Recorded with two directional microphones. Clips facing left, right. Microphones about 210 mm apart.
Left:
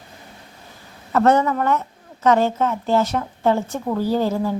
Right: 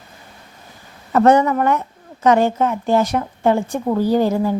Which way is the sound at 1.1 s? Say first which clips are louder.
Right 3 dB; 15° right (ahead or behind).